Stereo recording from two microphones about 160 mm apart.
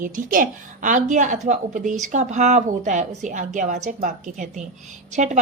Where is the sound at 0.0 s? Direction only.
55° right (ahead or behind).